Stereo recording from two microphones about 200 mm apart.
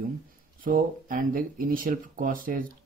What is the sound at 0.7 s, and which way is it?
Speech, 45° right (ahead or behind).